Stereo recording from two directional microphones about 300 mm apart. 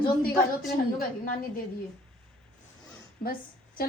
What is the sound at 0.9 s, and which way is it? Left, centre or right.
Speech, left.